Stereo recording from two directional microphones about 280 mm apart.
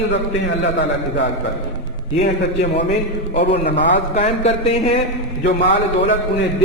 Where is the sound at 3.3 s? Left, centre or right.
Left.